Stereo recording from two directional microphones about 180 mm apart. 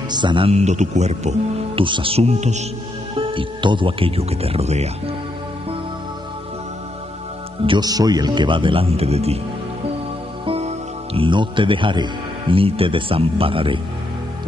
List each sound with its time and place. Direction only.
0.1 s speech: 25° right (ahead or behind)
1.8 s speech: 30° right (ahead or behind)
3.2 s speech: 30° right (ahead or behind)
7.6 s speech: 25° right (ahead or behind)
10.4 s music: 30° right (ahead or behind)
11.1 s speech: 25° right (ahead or behind)